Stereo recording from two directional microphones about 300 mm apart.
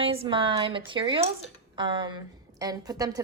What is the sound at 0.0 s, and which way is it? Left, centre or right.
A woman's voice, centre.